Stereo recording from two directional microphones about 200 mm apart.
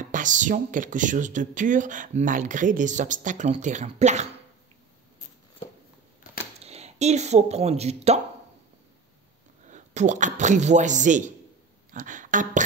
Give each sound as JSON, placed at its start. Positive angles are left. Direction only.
{"t": 0.1, "sound": "speech", "side_deg": -40}
{"t": 6.6, "sound": "speech", "side_deg": -30}
{"t": 9.7, "sound": "a man's voice", "side_deg": -35}